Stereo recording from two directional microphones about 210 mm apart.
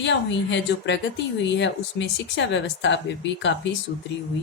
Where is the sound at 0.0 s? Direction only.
60° left (ahead or behind).